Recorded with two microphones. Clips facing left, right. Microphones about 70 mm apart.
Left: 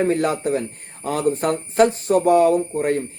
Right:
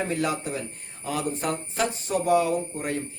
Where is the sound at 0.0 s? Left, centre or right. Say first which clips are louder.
Left 7 dB; left.